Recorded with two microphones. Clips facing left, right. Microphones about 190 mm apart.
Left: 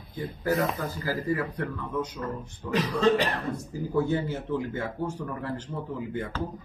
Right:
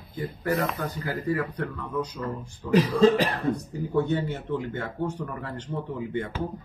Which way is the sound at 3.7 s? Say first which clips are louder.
Right 1 dB; 5° left (ahead or behind).